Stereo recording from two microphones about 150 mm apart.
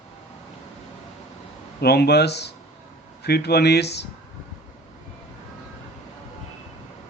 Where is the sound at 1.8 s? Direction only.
90° left.